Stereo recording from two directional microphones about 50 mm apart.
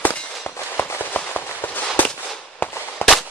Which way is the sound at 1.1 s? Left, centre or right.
Left.